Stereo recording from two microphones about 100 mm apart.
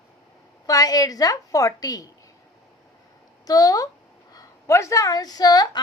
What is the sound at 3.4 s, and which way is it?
Speech, 40° left (ahead or behind).